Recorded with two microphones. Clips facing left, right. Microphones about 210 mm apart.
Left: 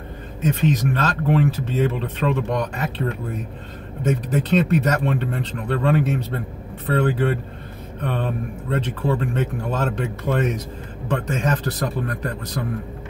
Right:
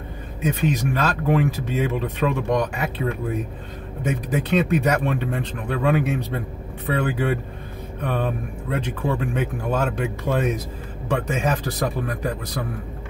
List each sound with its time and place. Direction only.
0.4 s speech: 10° right (ahead or behind)
8.6 s a man's voice: 10° right (ahead or behind)